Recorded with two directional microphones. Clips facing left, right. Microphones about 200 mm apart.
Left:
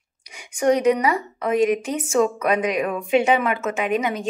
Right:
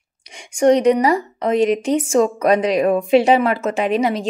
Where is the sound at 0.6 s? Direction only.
30° right (ahead or behind).